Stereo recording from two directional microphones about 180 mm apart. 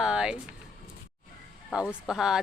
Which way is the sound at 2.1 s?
5° right (ahead or behind).